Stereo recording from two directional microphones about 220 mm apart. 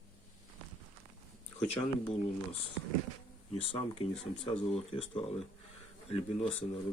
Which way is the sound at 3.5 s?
25° left (ahead or behind).